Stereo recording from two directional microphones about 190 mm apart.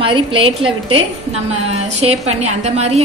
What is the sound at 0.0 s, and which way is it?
A woman's voice, 30° right (ahead or behind).